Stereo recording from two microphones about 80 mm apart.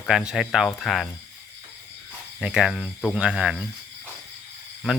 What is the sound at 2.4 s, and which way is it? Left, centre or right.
Speech, centre.